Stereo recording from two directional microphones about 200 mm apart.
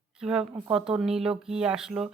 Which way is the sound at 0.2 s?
5° right (ahead or behind).